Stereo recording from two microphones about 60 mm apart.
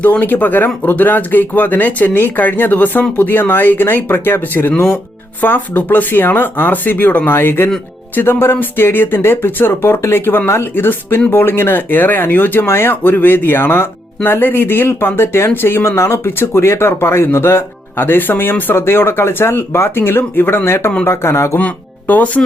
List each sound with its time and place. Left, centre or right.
0.0 s speech: left
21.6 s speech: left